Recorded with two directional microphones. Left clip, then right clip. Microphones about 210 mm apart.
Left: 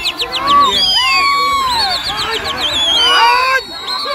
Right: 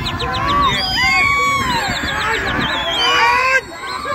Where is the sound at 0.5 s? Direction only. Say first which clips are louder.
Left 7 dB; 35° left (ahead or behind).